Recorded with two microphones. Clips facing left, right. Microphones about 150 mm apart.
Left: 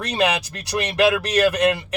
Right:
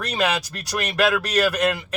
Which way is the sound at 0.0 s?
15° left (ahead or behind).